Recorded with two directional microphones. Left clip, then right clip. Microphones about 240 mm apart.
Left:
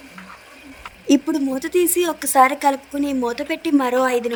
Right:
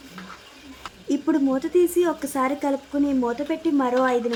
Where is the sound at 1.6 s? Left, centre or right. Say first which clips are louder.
Left 1 dB; left.